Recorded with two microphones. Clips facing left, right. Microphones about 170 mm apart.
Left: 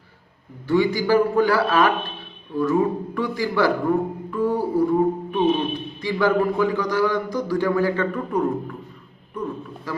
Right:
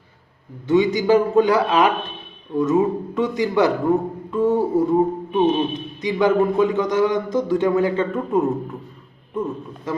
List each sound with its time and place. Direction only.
0.7 s a man's voice: 20° right (ahead or behind)